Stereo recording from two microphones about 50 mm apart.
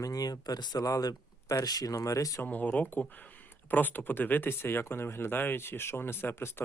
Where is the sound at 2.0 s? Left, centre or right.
Left.